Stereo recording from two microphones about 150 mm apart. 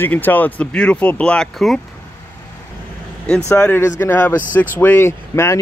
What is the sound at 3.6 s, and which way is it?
Speech, 15° left (ahead or behind).